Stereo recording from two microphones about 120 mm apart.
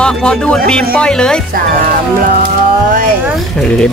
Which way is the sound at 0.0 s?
5° left (ahead or behind).